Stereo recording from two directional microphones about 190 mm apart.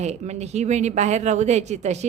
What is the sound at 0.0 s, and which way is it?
Speech, 35° right (ahead or behind).